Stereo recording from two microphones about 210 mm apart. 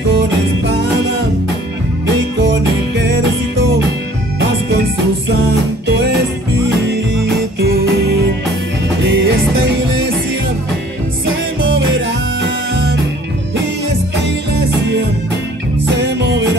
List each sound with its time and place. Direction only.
4.4 s music: 55° right (ahead or behind)
5.9 s music: 55° right (ahead or behind)
11.6 s music: 60° right (ahead or behind)
16.0 s music: 55° right (ahead or behind)